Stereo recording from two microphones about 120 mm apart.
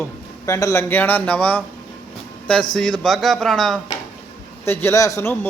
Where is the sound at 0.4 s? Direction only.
25° left (ahead or behind); by 3.8 s centre (ahead or behind).